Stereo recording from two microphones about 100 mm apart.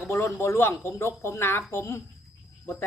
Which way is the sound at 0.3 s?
25° left (ahead or behind).